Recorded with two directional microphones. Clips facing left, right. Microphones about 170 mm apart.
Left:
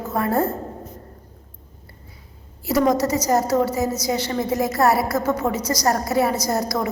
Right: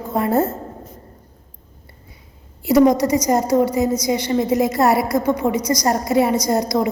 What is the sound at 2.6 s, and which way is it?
A woman's voice, 20° right (ahead or behind).